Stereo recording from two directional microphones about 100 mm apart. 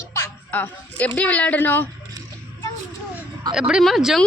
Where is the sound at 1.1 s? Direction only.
15° left (ahead or behind).